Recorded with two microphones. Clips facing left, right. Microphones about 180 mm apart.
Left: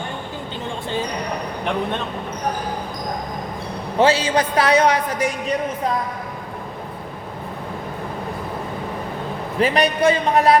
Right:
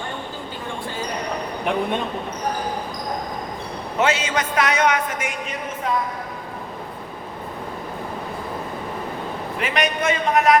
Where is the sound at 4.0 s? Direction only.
30° left (ahead or behind).